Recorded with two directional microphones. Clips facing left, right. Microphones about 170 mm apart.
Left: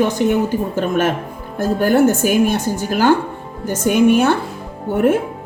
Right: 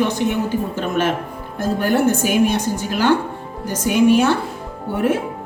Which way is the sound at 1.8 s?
45° left (ahead or behind).